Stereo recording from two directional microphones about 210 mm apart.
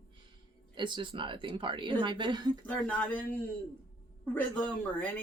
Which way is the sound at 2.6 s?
5° left (ahead or behind).